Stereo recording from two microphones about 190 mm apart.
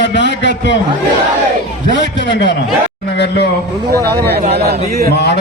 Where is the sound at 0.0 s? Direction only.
70° left (ahead or behind).